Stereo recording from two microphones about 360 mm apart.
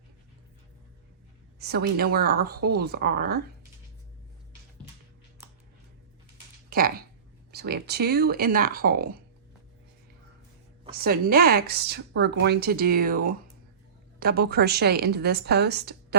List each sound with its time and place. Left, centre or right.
1.5 s speech: right
6.7 s speech: right
10.9 s speech: right